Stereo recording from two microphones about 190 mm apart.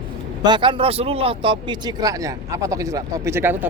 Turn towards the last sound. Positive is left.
turn(degrees=-10)  # may be behind; listen again after turning